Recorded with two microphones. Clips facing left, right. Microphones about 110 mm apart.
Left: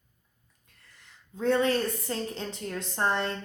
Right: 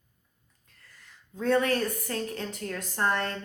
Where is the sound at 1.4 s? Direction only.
25° left (ahead or behind).